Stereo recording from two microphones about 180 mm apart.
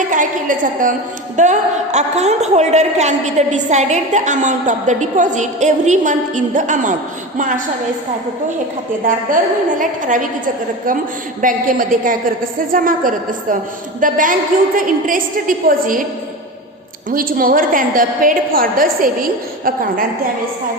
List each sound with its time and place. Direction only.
0.1 s a woman's voice: 45° right (ahead or behind)
9.0 s a woman's voice: 45° right (ahead or behind)
17.1 s a woman's voice: 50° right (ahead or behind)